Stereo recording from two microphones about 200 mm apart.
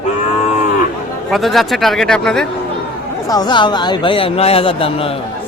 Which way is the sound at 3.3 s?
20° left (ahead or behind).